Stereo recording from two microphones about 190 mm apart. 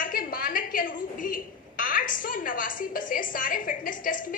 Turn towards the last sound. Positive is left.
turn(degrees=45)  # may be behind; listen again after turning